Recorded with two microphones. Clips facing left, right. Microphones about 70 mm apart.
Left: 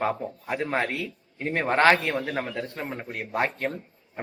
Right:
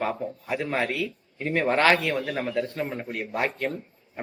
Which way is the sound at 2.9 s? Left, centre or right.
Left.